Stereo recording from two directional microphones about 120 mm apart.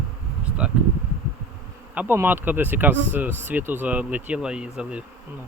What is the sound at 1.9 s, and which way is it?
Speech, 15° right (ahead or behind).